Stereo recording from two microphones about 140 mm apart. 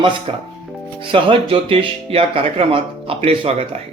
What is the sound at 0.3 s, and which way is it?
Speech, 40° right (ahead or behind).